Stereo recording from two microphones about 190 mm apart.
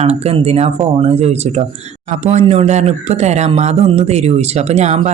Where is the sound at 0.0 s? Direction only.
35° right (ahead or behind).